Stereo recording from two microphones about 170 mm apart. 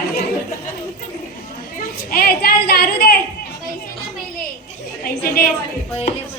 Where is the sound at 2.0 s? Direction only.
60° left (ahead or behind).